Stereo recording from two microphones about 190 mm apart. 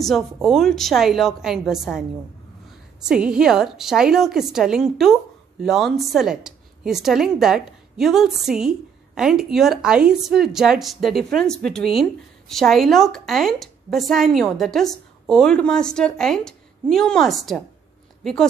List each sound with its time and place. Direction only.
0.0 s a woman's voice: centre (ahead or behind)